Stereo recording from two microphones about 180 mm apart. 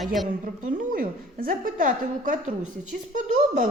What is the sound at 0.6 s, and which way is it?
A woman's voice, 50° right (ahead or behind).